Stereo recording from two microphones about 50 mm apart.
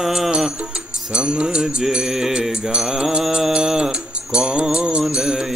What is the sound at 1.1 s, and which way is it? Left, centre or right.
Music, centre.